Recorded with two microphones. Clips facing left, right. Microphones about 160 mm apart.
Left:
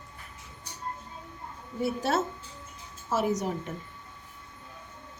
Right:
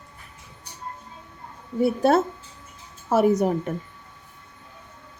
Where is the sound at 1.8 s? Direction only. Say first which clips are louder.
Right 8 dB; 55° right (ahead or behind).